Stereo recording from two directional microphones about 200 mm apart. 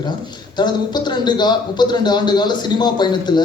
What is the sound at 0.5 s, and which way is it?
Speech, 20° left (ahead or behind).